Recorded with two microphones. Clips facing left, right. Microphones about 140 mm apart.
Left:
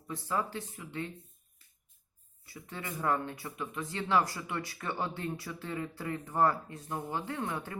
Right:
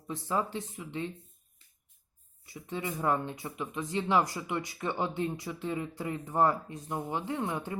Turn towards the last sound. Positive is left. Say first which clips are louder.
# right 3 dB
turn(degrees=-20)  # may be behind; listen again after turning